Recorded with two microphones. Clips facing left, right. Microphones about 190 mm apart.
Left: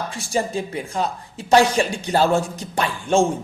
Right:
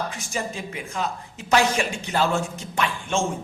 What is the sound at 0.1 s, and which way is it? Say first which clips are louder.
Speech: left 7 dB; 35° left (ahead or behind).